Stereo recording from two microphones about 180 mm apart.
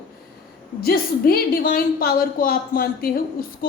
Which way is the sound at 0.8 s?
55° left (ahead or behind).